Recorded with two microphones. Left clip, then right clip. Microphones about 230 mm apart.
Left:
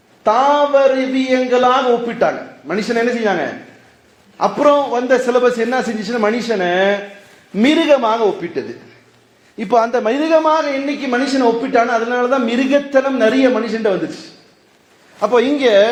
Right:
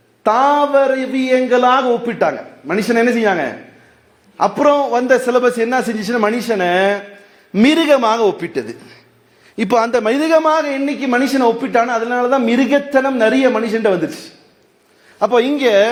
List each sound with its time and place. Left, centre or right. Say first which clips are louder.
0.2 s speech: even; right
15.2 s speech: even; right